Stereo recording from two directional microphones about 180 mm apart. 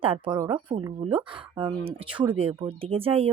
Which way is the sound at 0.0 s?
30° right (ahead or behind).